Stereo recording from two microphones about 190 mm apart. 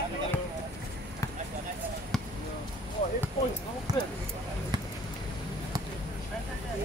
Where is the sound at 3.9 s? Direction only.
20° right (ahead or behind).